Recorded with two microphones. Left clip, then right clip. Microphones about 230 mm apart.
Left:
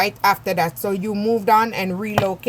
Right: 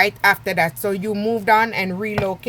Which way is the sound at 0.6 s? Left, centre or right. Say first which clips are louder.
Right 1 dB; right.